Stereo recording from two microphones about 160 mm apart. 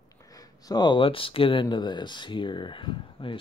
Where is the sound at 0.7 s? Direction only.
25° left (ahead or behind).